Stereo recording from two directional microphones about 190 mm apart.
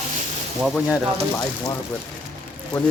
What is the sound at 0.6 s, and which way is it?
Speech, centre (ahead or behind).